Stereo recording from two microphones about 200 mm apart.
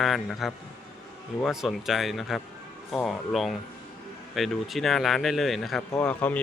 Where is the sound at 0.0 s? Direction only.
Centre (ahead or behind).